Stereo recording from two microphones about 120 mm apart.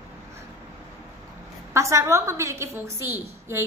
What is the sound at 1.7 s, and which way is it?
A woman's voice, 25° right (ahead or behind).